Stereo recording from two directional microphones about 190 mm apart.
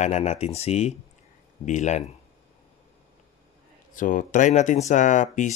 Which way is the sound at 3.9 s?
45° left (ahead or behind).